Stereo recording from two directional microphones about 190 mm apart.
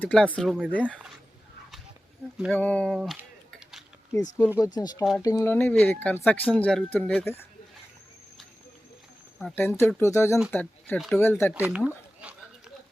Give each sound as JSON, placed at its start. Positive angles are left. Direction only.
{"t": 0.0, "sound": "speech", "side_deg": 5}
{"t": 2.6, "sound": "a sound", "side_deg": 5}
{"t": 4.1, "sound": "speech", "side_deg": 10}
{"t": 9.4, "sound": "speech", "side_deg": 10}
{"t": 11.5, "sound": "speech", "side_deg": -10}
{"t": 12.2, "sound": "a sound", "side_deg": -5}